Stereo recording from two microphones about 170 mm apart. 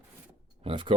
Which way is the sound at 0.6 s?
30° right (ahead or behind).